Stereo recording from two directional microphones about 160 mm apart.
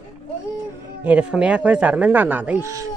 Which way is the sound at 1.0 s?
10° right (ahead or behind).